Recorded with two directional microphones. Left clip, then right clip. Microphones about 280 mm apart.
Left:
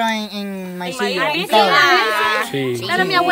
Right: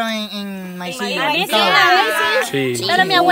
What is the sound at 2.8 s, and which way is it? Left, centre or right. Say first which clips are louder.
Speech: right 3 dB; right.